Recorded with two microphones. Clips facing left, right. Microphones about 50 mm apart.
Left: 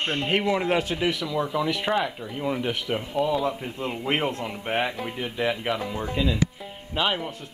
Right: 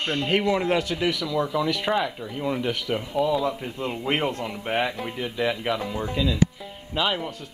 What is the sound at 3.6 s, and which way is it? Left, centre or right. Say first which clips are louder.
Speech: right 1 dB; centre.